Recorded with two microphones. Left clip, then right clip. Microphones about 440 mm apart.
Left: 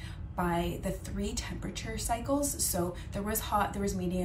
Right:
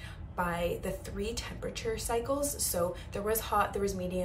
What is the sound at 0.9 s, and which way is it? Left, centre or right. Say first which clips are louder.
A woman's voice: right 1 dB; right.